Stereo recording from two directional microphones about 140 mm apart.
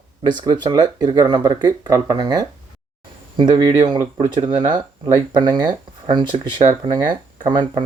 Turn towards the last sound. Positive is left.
turn(degrees=-35)  # may be behind; listen again after turning